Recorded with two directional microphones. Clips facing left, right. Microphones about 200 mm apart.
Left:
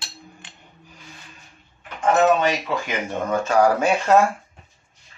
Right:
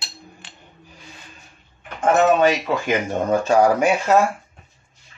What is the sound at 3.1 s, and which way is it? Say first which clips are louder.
Speech: right 2 dB; 35° right (ahead or behind).